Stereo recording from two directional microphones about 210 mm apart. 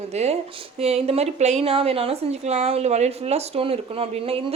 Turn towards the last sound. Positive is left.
turn(degrees=-25)  # may be behind; listen again after turning